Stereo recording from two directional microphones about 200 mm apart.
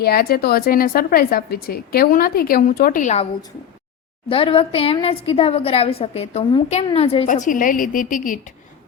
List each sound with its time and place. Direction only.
0.0 s speech: 50° left (ahead or behind)
4.3 s a woman's voice: 25° left (ahead or behind); by 8.4 s 45° left (ahead or behind)